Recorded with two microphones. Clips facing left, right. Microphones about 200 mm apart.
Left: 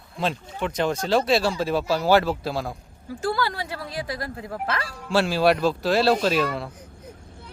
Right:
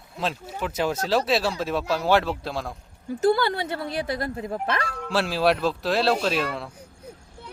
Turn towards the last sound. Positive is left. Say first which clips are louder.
# left 3 dB
turn(degrees=5)  # may be behind; listen again after turning